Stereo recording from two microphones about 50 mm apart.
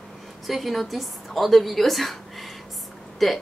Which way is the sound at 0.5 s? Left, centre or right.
Centre.